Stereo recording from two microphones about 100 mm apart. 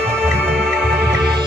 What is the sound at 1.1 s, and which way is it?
Music, 45° right (ahead or behind).